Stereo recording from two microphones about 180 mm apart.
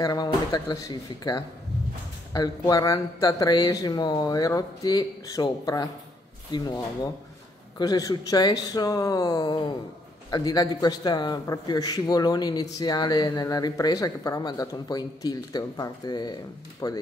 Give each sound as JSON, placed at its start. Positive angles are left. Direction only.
{"t": 0.0, "sound": "speech", "side_deg": 20}